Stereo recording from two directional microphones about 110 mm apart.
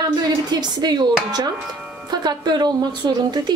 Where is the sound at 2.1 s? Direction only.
40° right (ahead or behind).